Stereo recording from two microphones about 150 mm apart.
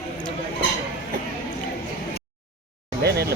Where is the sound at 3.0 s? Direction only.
90° right.